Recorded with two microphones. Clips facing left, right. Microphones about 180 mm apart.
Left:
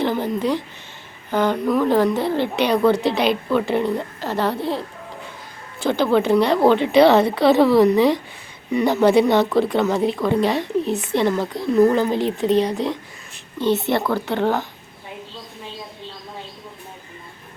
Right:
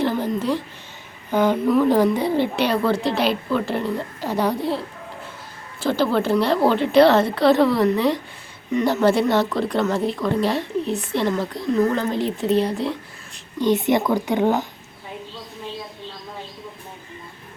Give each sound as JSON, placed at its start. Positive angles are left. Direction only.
{"t": 0.0, "sound": "a woman's voice", "side_deg": -5}
{"t": 4.2, "sound": "speech", "side_deg": -10}
{"t": 5.8, "sound": "a woman's voice", "side_deg": 0}
{"t": 13.6, "sound": "speech", "side_deg": -15}